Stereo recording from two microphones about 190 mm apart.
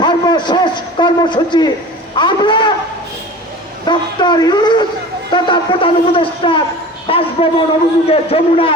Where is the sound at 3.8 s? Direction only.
25° left (ahead or behind).